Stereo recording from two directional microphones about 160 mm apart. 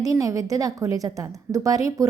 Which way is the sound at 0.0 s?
20° right (ahead or behind).